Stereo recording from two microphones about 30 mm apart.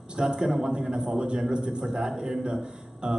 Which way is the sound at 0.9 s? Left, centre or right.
Right.